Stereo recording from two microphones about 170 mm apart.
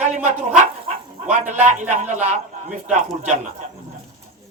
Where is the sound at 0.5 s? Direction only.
45° right (ahead or behind).